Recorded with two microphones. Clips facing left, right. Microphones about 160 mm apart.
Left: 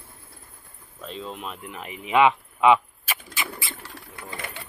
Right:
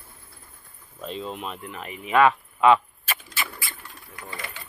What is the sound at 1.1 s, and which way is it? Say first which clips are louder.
Speech: right 2 dB; 5° right (ahead or behind).